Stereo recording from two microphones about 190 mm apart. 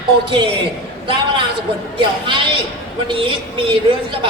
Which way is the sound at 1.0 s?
25° right (ahead or behind).